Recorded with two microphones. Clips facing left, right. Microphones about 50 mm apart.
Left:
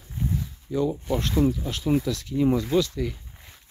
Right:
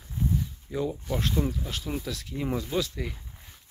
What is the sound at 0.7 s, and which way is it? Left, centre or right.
Speech, centre.